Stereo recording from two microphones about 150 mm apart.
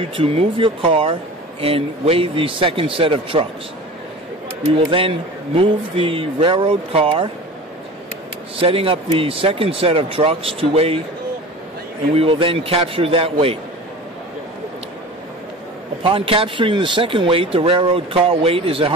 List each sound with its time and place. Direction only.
0.1 s speech: 40° right (ahead or behind)
4.6 s speech: 40° right (ahead or behind)
8.5 s speech: 40° right (ahead or behind)
12.2 s speech: 35° right (ahead or behind)
16.0 s speech: 35° right (ahead or behind)